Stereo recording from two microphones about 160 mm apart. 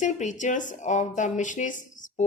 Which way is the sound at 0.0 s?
50° left (ahead or behind).